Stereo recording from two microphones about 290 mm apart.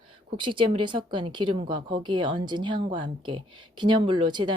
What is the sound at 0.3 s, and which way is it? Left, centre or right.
A woman's voice, centre.